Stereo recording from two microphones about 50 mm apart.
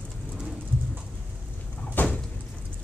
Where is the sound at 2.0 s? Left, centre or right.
Left.